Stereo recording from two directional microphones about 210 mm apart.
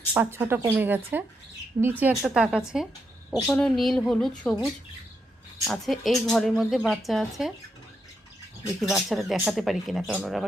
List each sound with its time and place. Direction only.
0.1 s speech: 10° right (ahead or behind)
5.6 s speech: centre (ahead or behind)
8.8 s speech: centre (ahead or behind)